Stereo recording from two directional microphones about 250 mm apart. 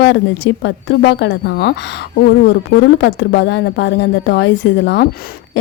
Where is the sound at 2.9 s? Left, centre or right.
Left.